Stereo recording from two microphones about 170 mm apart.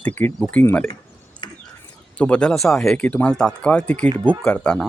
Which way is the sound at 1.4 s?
30° left (ahead or behind).